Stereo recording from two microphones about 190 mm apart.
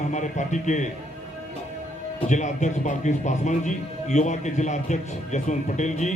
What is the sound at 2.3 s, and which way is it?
A man's voice, 40° left (ahead or behind).